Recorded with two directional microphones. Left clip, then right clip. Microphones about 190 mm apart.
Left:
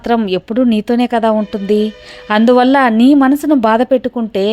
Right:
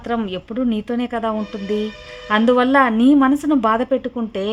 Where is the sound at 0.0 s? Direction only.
35° left (ahead or behind).